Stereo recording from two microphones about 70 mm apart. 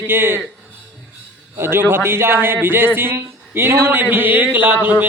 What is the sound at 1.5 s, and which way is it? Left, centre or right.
A man's voice, right.